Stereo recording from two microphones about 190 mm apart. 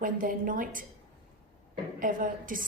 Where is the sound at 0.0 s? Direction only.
45° right (ahead or behind).